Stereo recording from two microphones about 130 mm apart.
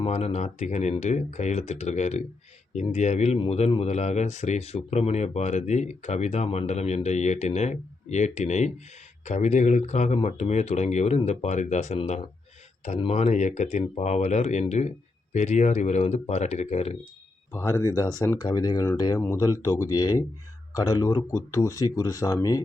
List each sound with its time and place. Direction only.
0.0 s speech: 55° left (ahead or behind)
17.5 s speech: 20° left (ahead or behind)
19.2 s speech: 20° left (ahead or behind)